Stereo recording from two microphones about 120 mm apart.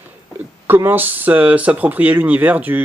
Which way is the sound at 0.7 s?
15° right (ahead or behind).